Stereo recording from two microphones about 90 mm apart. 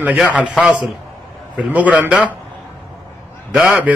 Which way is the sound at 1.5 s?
15° right (ahead or behind).